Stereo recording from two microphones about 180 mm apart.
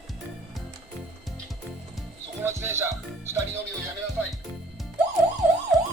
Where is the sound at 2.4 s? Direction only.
15° right (ahead or behind).